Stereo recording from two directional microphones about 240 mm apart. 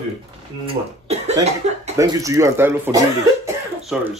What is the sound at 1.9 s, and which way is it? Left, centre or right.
Speech, centre.